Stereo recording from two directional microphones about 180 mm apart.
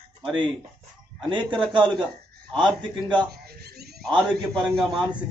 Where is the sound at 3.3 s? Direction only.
60° right (ahead or behind).